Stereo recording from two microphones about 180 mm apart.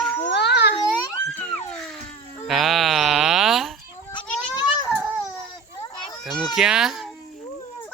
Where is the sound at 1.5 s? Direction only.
5° left (ahead or behind).